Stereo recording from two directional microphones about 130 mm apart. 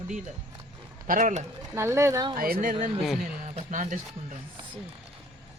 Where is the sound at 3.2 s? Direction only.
75° right (ahead or behind).